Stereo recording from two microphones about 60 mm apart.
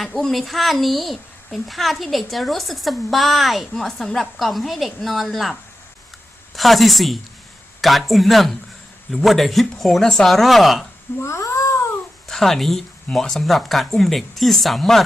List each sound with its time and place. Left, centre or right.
0.0 s a woman's voice: centre
6.6 s a woman's voice: centre
11.2 s cat: left
12.3 s a woman's voice: centre